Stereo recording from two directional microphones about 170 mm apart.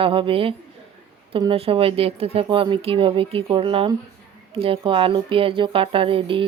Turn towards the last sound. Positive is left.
turn(degrees=-30)  # may be behind; listen again after turning